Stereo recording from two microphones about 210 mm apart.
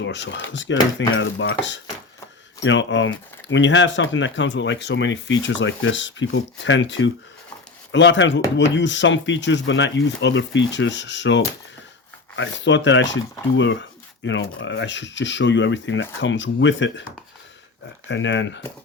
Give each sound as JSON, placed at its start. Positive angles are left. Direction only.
{"t": 0.0, "sound": "speech", "side_deg": 55}
{"t": 18.1, "sound": "speech", "side_deg": 60}